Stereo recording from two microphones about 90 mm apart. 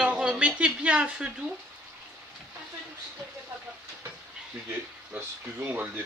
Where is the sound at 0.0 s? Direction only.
10° right (ahead or behind).